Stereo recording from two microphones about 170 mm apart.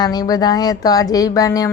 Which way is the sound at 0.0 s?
25° left (ahead or behind).